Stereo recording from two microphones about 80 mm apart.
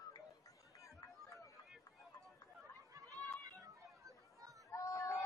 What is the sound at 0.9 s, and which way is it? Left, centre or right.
Chatter, left.